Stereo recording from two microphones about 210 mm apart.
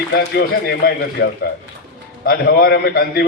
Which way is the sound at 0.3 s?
50° left (ahead or behind).